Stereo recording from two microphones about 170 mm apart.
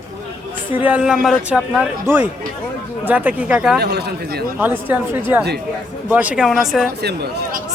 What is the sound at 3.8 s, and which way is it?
Speech, 75° right (ahead or behind).